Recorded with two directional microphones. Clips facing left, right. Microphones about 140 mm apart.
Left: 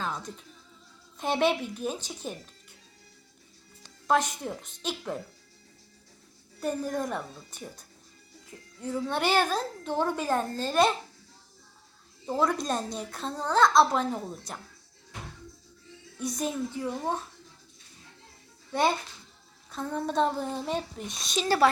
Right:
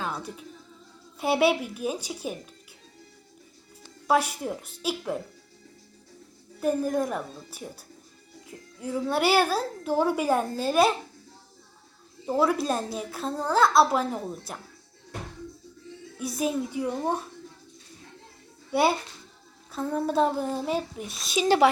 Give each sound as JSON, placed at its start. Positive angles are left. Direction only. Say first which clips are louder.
{"t": 0.0, "sound": "music", "louder": "right 1 dB", "side_deg": -10}
{"t": 1.2, "sound": "a woman's voice", "louder": "right 3 dB", "side_deg": -10}
{"t": 4.0, "sound": "a woman's voice", "louder": "right 2 dB", "side_deg": -10}
{"t": 6.6, "sound": "a child's voice", "louder": "right 5 dB", "side_deg": -5}
{"t": 12.2, "sound": "a child's voice", "louder": "right 3 dB", "side_deg": -5}
{"t": 16.1, "sound": "a woman's voice", "louder": "right 3 dB", "side_deg": -5}
{"t": 18.7, "sound": "a woman's voice", "louder": "right 3 dB", "side_deg": -10}
{"t": 21.4, "sound": "speech", "louder": "right 3 dB", "side_deg": -20}